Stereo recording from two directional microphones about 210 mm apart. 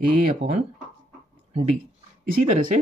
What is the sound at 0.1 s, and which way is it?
Speech, 35° right (ahead or behind).